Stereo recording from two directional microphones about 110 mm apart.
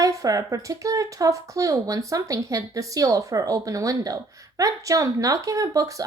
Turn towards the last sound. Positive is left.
turn(degrees=-30)  # may be behind; listen again after turning